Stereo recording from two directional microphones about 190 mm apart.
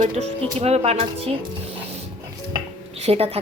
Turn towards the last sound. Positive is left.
turn(degrees=-30)  # may be behind; listen again after turning